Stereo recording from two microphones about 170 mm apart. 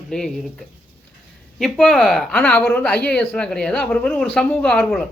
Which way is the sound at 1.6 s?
5° left (ahead or behind).